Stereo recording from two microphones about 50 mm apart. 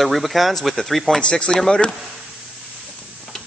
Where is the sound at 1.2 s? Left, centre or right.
Centre.